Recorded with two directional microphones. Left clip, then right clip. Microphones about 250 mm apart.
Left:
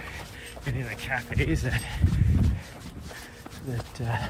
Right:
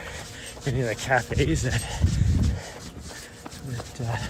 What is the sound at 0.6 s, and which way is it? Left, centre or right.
Speech, centre.